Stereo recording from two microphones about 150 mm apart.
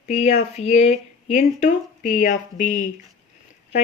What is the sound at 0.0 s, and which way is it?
A woman's voice, 50° left (ahead or behind).